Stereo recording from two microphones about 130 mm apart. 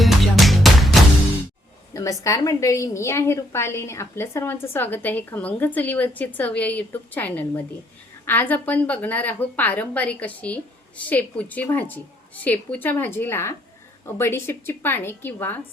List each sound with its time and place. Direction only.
0.0 s music: centre (ahead or behind)
1.9 s a woman's voice: 25° left (ahead or behind)